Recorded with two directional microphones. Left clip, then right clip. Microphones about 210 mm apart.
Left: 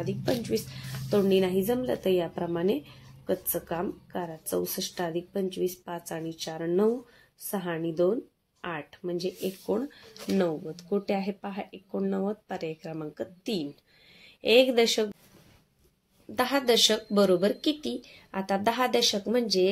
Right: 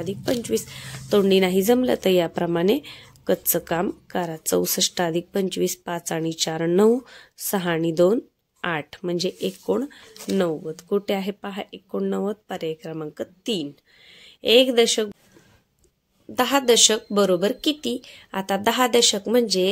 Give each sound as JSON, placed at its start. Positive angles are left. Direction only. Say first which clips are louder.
{"t": 0.0, "sound": "a woman's voice", "louder": "right 4 dB", "side_deg": -30}
{"t": 16.3, "sound": "a woman's voice", "louder": "right 6 dB", "side_deg": -25}